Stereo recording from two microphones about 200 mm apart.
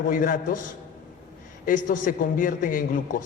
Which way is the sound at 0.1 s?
45° left (ahead or behind).